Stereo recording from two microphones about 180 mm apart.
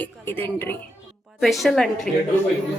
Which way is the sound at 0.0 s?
10° left (ahead or behind).